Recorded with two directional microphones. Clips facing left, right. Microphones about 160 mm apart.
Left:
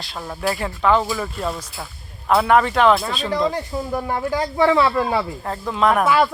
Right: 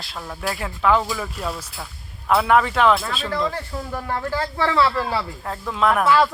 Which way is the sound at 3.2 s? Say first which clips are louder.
Left 3 dB; 20° left (ahead or behind).